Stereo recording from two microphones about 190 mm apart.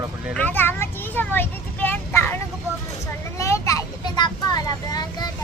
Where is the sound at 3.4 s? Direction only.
15° left (ahead or behind).